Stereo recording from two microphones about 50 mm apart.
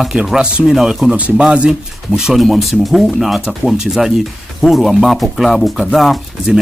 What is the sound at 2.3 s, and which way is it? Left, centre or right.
Speech, centre.